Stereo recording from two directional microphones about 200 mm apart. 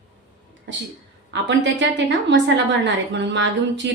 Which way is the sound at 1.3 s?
60° right (ahead or behind).